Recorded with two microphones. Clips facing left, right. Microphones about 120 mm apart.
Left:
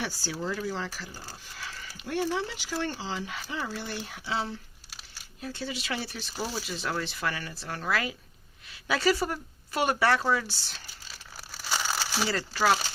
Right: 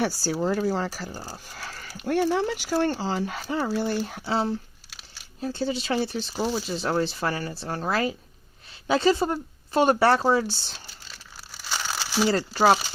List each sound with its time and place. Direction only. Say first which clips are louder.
0.2 s speech: right 8 dB; 45° right (ahead or behind); by 10.8 s 25° right (ahead or behind)
11.1 s crumpling: left 3 dB; centre (ahead or behind)
12.3 s speech: right 6 dB; 35° right (ahead or behind)